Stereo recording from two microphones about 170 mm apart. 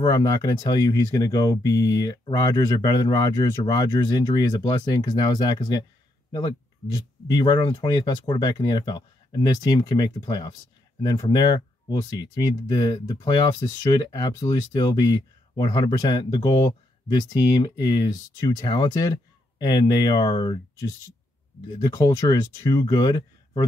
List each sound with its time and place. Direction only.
0.0 s speech: 20° left (ahead or behind)
7.2 s speech: 25° left (ahead or behind)
21.7 s speech: 25° left (ahead or behind)